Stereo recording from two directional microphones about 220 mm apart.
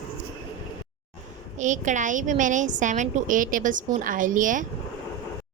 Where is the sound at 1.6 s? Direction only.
35° right (ahead or behind).